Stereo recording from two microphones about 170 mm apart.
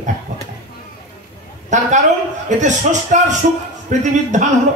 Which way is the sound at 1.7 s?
45° right (ahead or behind).